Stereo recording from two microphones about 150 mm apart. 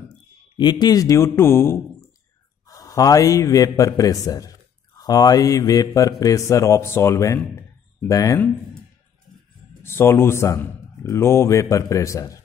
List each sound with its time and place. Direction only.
0.6 s a man's voice: 30° left (ahead or behind)
9.8 s a man's voice: 15° left (ahead or behind)